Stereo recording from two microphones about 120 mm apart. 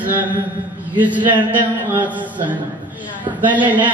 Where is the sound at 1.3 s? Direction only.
40° right (ahead or behind).